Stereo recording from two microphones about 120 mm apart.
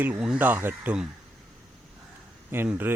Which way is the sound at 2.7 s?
15° right (ahead or behind).